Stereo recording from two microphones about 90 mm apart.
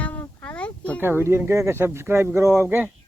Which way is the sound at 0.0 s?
20° left (ahead or behind).